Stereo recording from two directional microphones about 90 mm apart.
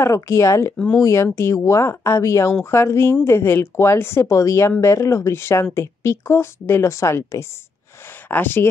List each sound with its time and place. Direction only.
0.0 s speech: 35° left (ahead or behind)
0.7 s speech: 10° left (ahead or behind)
1.0 s speech: 30° left (ahead or behind)